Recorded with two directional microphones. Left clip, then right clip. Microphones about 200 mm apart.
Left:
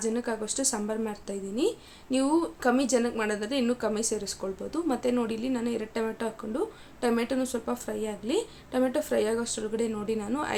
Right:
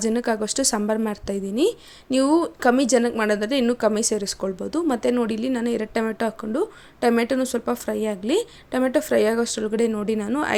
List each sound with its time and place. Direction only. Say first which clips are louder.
0.0 s a woman's voice: right 7 dB; 40° right (ahead or behind)